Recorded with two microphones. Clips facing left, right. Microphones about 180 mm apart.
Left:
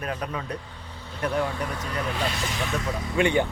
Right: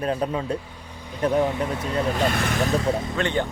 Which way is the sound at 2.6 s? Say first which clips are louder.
Right 7 dB; 30° right (ahead or behind).